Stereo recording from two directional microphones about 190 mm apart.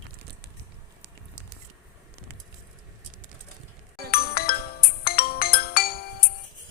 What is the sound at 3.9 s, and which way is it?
Music, 55° left (ahead or behind).